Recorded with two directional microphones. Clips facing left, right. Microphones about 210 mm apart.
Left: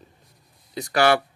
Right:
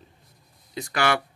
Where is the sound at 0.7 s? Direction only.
40° left (ahead or behind).